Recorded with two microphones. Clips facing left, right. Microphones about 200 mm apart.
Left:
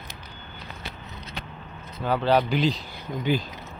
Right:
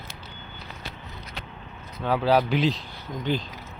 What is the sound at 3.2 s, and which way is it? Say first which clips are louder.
Speech: left 2 dB; 10° left (ahead or behind).